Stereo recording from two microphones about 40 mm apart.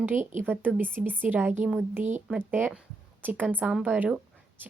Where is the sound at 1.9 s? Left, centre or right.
Right.